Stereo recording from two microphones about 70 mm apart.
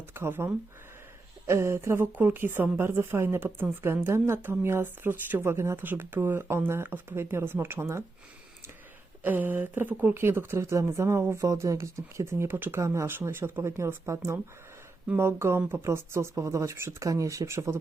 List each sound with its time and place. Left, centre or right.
0.1 s a woman's voice: right
9.2 s a woman's voice: right
12.8 s a woman's voice: right